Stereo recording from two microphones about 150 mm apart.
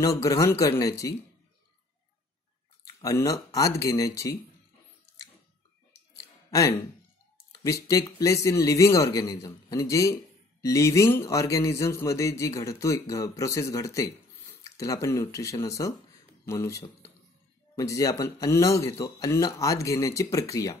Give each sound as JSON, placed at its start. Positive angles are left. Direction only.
{"t": 0.0, "sound": "speech", "side_deg": 25}
{"t": 2.8, "sound": "speech", "side_deg": 20}
{"t": 6.5, "sound": "speech", "side_deg": 20}